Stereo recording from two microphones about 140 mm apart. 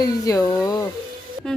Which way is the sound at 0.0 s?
25° left (ahead or behind).